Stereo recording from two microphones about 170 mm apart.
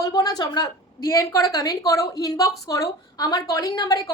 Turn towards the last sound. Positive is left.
turn(degrees=25)  # may be behind; listen again after turning